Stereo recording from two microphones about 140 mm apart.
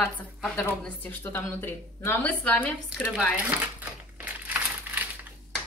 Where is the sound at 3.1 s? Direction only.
10° right (ahead or behind).